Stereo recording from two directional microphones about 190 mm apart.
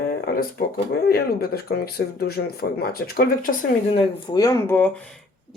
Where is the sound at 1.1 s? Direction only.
55° left (ahead or behind).